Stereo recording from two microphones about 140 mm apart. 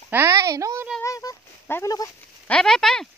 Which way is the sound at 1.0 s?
25° left (ahead or behind).